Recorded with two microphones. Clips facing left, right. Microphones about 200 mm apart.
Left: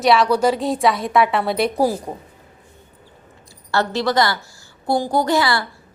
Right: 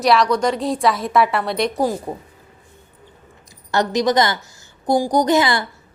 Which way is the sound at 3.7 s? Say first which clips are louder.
Right 2 dB; 20° right (ahead or behind).